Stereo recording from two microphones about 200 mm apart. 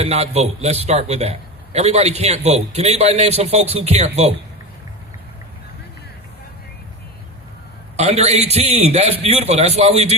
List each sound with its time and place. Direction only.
0.0 s a man's voice: 30° right (ahead or behind)
7.9 s a man's voice: 35° right (ahead or behind)